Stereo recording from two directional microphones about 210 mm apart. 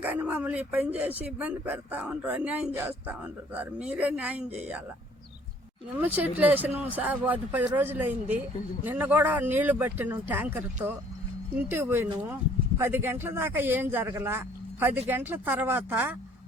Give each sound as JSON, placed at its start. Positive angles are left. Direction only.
{"t": 0.0, "sound": "speech", "side_deg": -10}
{"t": 6.0, "sound": "speech", "side_deg": -10}
{"t": 11.7, "sound": "speech", "side_deg": -10}